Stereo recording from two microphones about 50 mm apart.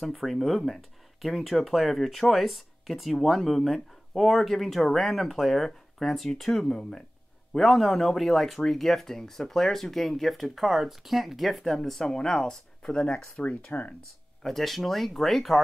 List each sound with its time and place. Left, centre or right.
0.0 s speech: centre
7.5 s speech: centre
13.4 s speech: left
14.4 s speech: centre